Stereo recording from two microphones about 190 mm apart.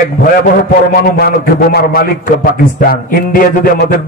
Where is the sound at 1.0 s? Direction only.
55° left (ahead or behind).